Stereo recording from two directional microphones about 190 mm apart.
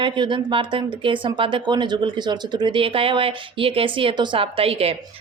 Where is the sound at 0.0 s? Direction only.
25° right (ahead or behind).